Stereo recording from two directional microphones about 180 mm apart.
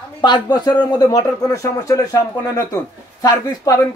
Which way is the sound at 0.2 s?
25° left (ahead or behind).